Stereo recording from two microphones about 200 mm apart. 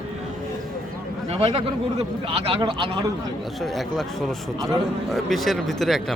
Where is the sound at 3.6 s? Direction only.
Centre (ahead or behind).